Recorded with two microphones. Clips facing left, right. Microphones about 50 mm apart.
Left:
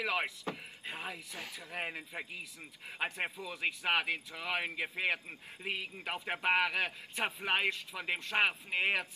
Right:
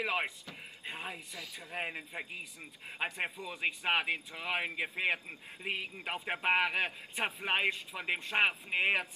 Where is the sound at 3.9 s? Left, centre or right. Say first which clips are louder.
Even; right.